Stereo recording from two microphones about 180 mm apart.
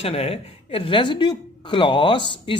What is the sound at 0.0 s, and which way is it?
A woman's voice, 35° left (ahead or behind).